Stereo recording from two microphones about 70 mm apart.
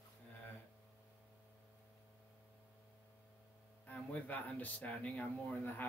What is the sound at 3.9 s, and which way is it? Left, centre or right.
Speech, left.